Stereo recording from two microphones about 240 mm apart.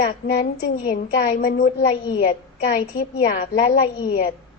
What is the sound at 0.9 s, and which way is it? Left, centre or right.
Speech, left.